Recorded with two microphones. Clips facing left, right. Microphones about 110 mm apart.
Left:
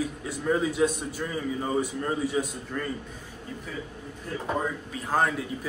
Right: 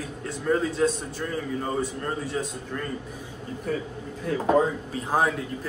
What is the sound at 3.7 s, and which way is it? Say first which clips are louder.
Speech: right 9 dB; 50° right (ahead or behind).